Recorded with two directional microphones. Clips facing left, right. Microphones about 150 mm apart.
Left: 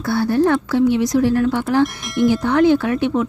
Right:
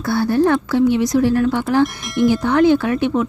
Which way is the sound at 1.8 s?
Centre (ahead or behind).